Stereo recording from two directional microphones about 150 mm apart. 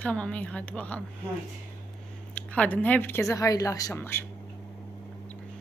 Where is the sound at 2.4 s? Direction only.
10° left (ahead or behind).